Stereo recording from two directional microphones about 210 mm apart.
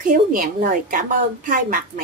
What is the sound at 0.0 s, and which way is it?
A woman's voice, 40° right (ahead or behind).